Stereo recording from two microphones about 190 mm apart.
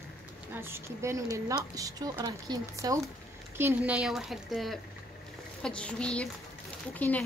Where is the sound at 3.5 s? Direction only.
10° right (ahead or behind); by 7.2 s 10° left (ahead or behind).